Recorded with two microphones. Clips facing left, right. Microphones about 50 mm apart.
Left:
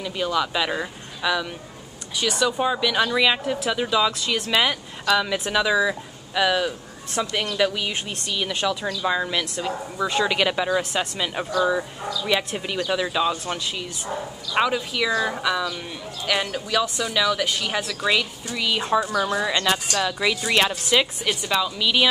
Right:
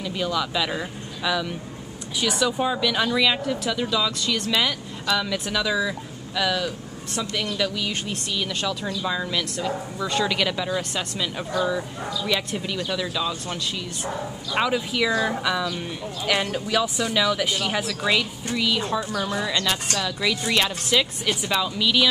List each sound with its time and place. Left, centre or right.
0.0 s speech: centre; by 8.0 s left
8.3 s speech: centre
14.5 s speech: centre
18.6 s speech: centre
21.4 s speech: centre